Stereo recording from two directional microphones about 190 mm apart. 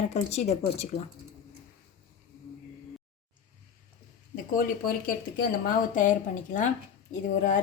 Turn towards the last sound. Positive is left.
turn(degrees=40)  # may be behind; listen again after turning